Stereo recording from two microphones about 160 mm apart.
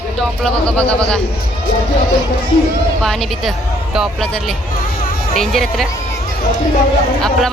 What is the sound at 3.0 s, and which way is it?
Speech, centre (ahead or behind).